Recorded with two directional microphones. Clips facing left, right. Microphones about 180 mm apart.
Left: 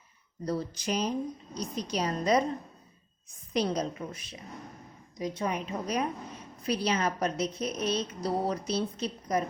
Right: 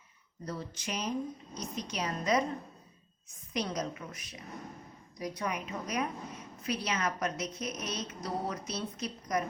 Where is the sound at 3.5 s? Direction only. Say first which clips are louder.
Left 5 dB; 30° left (ahead or behind).